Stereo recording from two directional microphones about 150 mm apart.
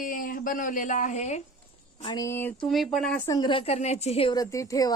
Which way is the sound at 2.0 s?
25° left (ahead or behind).